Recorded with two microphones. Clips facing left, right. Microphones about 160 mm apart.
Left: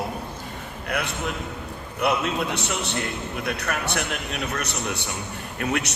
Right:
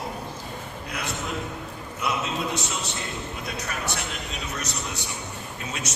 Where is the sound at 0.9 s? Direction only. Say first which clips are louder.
Left 3 dB; 60° left (ahead or behind).